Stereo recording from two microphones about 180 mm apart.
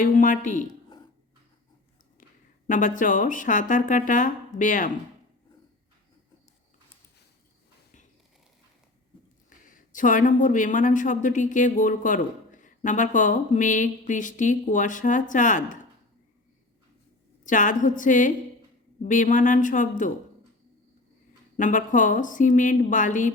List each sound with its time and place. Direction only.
0.0 s speech: 45° left (ahead or behind)
2.6 s speech: 45° left (ahead or behind)
9.5 s speech: 50° left (ahead or behind)
17.4 s speech: 45° left (ahead or behind)
21.6 s speech: 45° left (ahead or behind)